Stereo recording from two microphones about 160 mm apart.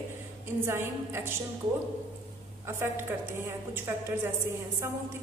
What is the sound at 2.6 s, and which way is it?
A woman's voice, 15° right (ahead or behind).